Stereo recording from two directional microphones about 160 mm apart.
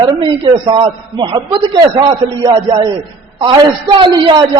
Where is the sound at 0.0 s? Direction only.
30° right (ahead or behind).